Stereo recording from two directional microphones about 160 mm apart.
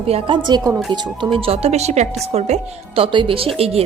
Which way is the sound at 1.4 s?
40° right (ahead or behind).